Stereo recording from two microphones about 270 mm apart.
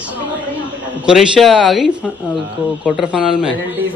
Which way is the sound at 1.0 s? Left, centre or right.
Centre.